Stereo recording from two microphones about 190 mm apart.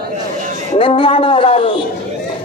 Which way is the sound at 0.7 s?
25° left (ahead or behind).